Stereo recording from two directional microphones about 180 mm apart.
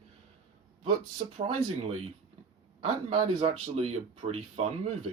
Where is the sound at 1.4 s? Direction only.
35° right (ahead or behind).